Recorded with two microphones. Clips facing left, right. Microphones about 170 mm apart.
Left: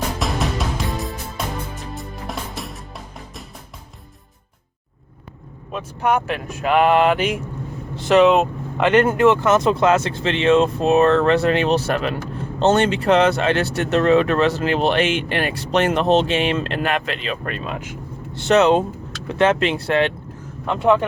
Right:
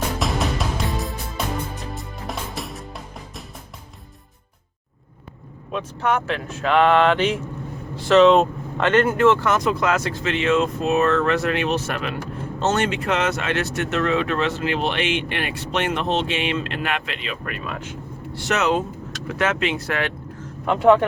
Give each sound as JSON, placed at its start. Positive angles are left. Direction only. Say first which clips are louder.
{"t": 0.2, "sound": "music", "louder": "left 1 dB", "side_deg": 0}
{"t": 6.0, "sound": "speech", "louder": "left 3 dB", "side_deg": 10}